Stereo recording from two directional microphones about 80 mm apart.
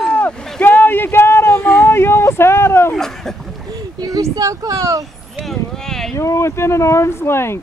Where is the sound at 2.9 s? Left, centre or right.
Centre.